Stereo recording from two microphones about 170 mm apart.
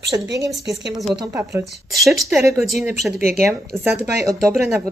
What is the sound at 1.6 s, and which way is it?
Speech, centre (ahead or behind).